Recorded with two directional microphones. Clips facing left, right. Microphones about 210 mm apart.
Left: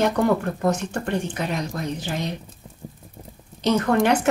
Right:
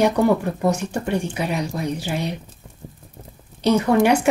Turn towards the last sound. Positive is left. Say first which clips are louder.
# right 3 dB
turn(degrees=-10)  # may be behind; listen again after turning